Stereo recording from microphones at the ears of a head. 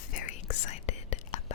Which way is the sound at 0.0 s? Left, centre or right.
Left.